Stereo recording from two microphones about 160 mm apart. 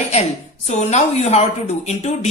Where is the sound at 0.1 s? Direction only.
45° left (ahead or behind).